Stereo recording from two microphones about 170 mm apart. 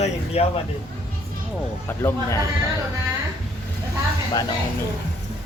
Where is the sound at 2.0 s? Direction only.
20° left (ahead or behind).